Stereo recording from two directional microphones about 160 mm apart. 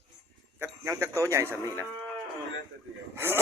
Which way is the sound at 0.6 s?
15° right (ahead or behind).